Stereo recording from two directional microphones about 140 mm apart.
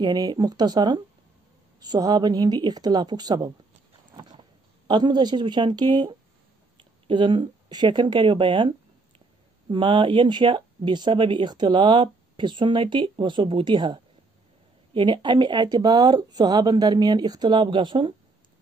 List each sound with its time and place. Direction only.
0.0 s speech: 30° right (ahead or behind)
4.1 s a sound: 30° right (ahead or behind)
4.8 s speech: 30° right (ahead or behind)